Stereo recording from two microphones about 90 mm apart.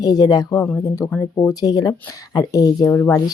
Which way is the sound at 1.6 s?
45° left (ahead or behind).